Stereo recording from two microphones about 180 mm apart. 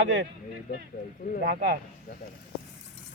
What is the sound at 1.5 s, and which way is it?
Speech, 65° right (ahead or behind).